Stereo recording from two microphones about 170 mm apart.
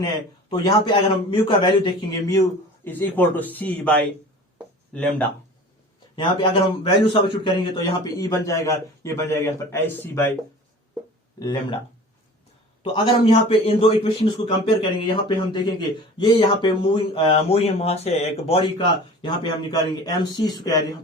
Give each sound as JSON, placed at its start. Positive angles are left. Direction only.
{"t": 0.5, "sound": "a man's voice", "side_deg": 25}
{"t": 6.1, "sound": "a man's voice", "side_deg": 30}
{"t": 11.3, "sound": "speech", "side_deg": 20}
{"t": 12.8, "sound": "a man's voice", "side_deg": 30}